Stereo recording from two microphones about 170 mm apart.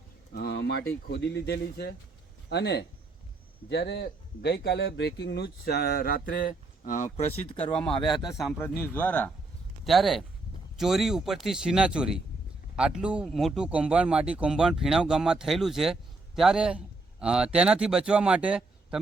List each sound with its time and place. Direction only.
0.3 s speech: 75° left (ahead or behind)
2.5 s speech: 80° left; by 7.3 s 50° left (ahead or behind)
7.9 s speech: 30° left (ahead or behind)
8.5 s speech: 15° left (ahead or behind); by 18.9 s 5° right (ahead or behind)